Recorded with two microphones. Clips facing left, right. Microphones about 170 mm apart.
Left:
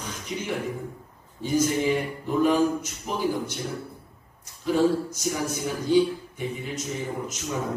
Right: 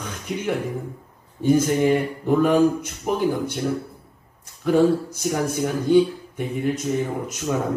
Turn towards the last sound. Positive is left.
turn(degrees=-55)  # may be behind; listen again after turning